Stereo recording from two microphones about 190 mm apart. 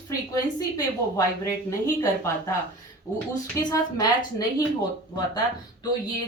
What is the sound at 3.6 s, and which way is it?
Speech, 20° left (ahead or behind).